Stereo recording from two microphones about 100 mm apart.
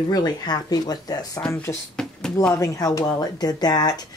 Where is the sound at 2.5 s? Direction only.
35° left (ahead or behind).